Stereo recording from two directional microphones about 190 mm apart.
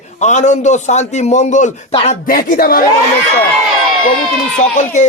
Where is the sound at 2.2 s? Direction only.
50° left (ahead or behind).